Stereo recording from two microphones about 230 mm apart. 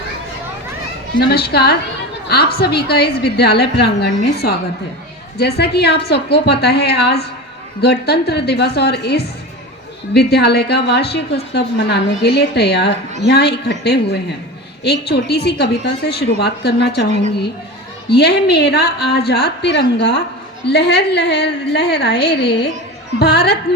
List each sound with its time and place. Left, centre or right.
1.3 s a woman's voice: left
18.2 s a woman's voice: left